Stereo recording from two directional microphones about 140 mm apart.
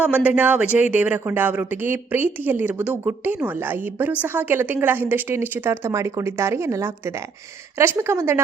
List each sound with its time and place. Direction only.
0.0 s speech: 10° right (ahead or behind)